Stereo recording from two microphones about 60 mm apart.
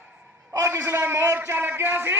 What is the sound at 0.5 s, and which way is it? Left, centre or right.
Speech, right.